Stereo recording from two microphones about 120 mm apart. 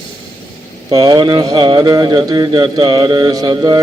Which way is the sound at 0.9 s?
35° right (ahead or behind).